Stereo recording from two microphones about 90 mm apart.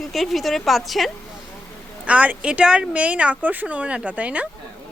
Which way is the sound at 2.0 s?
15° right (ahead or behind).